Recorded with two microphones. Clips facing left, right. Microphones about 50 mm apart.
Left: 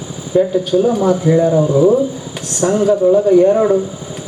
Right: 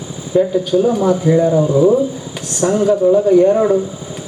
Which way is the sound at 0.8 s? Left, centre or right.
Centre.